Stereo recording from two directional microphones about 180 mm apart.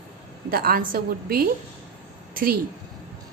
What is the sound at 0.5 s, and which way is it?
A woman's voice, 55° right (ahead or behind).